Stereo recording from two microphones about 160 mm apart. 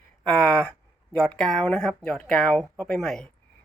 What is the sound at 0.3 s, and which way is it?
Speech, 5° left (ahead or behind).